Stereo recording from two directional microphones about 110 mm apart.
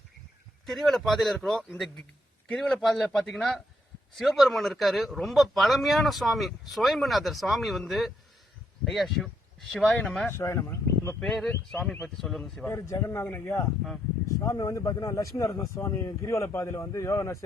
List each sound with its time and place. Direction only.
0.6 s speech: centre (ahead or behind)
10.3 s speech: 25° left (ahead or behind)
11.1 s speech: 5° left (ahead or behind)
12.6 s speech: 25° left (ahead or behind)
14.3 s speech: 30° left (ahead or behind)